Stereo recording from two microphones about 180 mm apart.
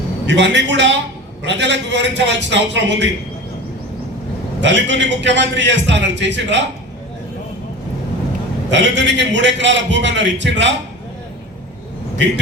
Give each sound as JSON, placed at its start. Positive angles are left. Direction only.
{"t": 0.3, "sound": "a man's voice", "side_deg": -80}
{"t": 4.6, "sound": "a man's voice", "side_deg": -80}
{"t": 8.7, "sound": "a man's voice", "side_deg": -80}